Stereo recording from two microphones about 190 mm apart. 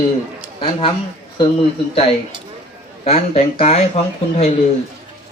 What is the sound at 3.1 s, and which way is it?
Speech, 35° left (ahead or behind).